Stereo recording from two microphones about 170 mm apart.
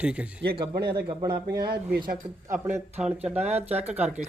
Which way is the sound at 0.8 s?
65° right (ahead or behind).